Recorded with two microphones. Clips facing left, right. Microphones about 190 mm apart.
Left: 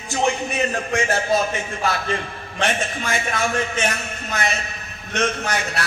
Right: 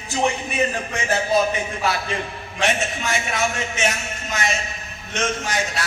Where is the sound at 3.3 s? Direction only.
55° left (ahead or behind).